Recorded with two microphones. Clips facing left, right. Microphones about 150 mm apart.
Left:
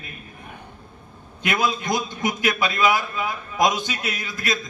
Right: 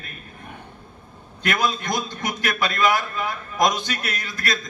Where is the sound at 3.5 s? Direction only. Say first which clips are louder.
Even; 5° left (ahead or behind).